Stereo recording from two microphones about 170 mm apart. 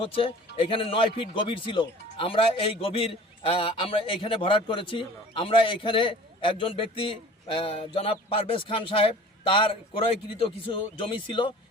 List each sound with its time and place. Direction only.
0.0 s a man's voice: 35° left (ahead or behind)